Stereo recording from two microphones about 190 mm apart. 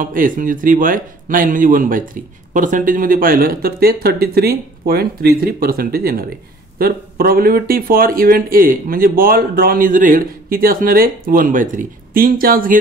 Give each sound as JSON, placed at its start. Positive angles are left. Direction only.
{"t": 0.0, "sound": "speech", "side_deg": -45}